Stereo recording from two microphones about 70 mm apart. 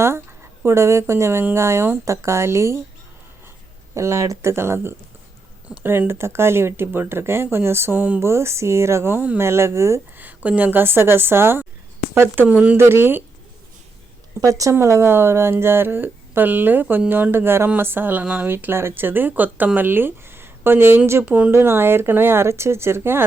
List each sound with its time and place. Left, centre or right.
0.6 s speech: right
3.9 s speech: right
4.5 s speech: right
7.9 s speech: right
8.2 s speech: right
10.2 s speech: right
12.5 s speech: centre
12.7 s speech: right
14.4 s speech: right
18.4 s speech: right
21.2 s speech: centre
21.5 s speech: right